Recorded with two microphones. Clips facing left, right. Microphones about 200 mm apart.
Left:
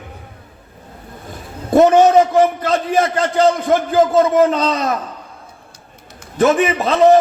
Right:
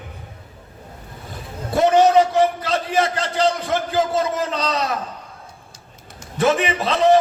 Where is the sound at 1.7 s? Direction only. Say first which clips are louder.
Left 4 dB; 50° left (ahead or behind).